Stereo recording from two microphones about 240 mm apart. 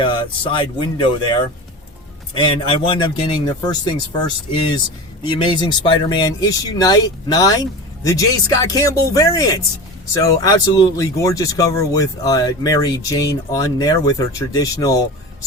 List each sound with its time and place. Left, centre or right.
0.0 s speech: left
5.2 s speech: centre